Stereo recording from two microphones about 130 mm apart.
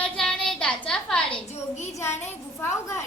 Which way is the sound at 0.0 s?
5° left (ahead or behind).